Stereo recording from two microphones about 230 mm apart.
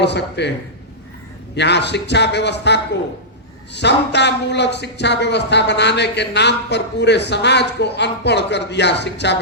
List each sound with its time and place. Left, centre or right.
0.0 s speech: left
1.5 s speech: left